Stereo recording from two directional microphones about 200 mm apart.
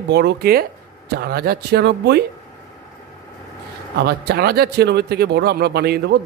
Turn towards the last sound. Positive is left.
turn(degrees=-55)  # may be behind; listen again after turning